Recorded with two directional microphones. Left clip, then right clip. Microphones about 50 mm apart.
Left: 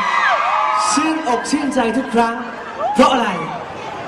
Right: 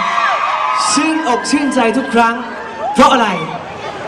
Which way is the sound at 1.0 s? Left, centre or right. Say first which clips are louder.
Right 3 dB; right.